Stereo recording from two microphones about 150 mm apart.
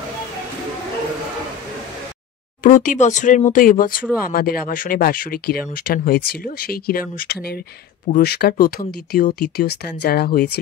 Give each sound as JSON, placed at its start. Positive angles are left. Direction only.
{"t": 2.6, "sound": "speech", "side_deg": 60}
{"t": 8.1, "sound": "speech", "side_deg": 90}